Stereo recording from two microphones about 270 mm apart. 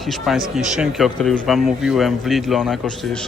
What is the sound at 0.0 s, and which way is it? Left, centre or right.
A man's voice, centre.